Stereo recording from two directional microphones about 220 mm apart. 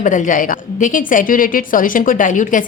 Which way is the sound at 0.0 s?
35° left (ahead or behind).